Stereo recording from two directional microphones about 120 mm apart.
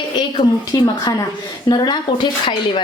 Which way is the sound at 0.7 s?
30° left (ahead or behind).